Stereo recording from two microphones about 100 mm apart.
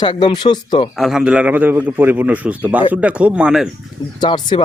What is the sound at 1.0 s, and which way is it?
A man's voice, 5° right (ahead or behind).